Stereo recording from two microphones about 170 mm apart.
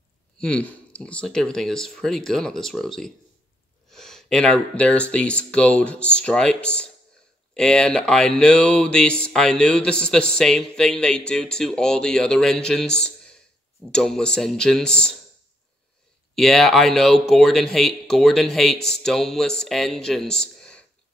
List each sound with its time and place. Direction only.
0.4 s a man's voice: 5° left (ahead or behind)
16.3 s a man's voice: centre (ahead or behind)